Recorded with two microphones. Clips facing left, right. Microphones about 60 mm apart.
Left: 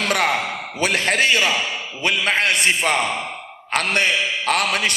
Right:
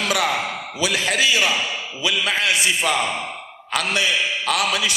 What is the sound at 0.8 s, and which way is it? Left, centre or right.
A man's voice, left.